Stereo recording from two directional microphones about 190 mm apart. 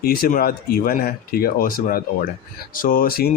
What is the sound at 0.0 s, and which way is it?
Speech, 50° left (ahead or behind).